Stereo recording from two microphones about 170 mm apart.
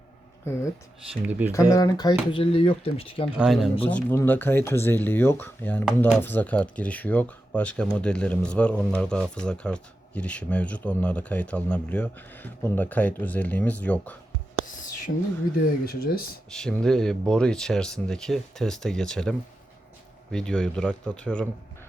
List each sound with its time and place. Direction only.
0.4 s speech: 15° left (ahead or behind)
1.2 s speech: 10° right (ahead or behind)
1.7 s speech: 20° left (ahead or behind)
3.3 s speech: 5° right (ahead or behind)
3.8 s speech: 10° left (ahead or behind)
15.1 s speech: 75° left (ahead or behind)
15.6 s speech: 60° left (ahead or behind)
16.5 s speech: 5° left (ahead or behind)